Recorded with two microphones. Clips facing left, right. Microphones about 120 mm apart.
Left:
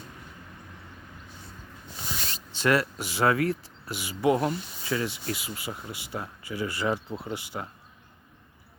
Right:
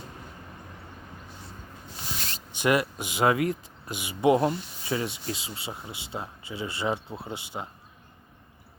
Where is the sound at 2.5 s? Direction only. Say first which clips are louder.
Even; 15° right (ahead or behind).